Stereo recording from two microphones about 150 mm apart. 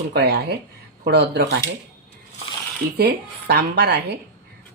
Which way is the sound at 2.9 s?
90° right.